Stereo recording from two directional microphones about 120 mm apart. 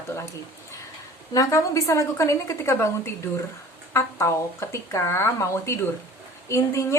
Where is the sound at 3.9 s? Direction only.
25° left (ahead or behind).